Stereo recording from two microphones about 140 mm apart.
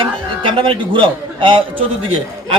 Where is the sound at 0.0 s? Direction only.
35° right (ahead or behind).